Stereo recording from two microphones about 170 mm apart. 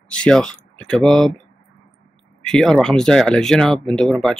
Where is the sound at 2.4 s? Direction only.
5° left (ahead or behind).